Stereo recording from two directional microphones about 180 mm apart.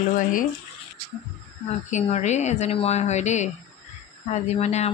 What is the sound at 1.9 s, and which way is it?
Mantra, 40° left (ahead or behind).